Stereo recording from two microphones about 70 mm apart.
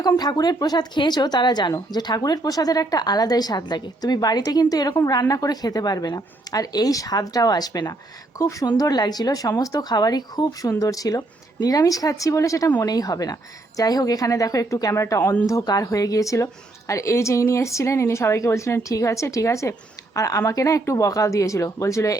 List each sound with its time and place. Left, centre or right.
0.2 s a woman's voice: left
8.4 s a woman's voice: left
8.6 s a woman's voice: left
12.8 s a woman's voice: left